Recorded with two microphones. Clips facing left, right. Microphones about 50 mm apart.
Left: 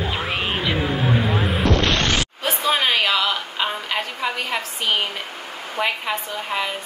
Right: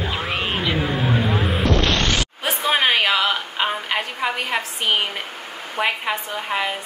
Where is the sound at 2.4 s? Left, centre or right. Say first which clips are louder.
Right 2 dB; centre.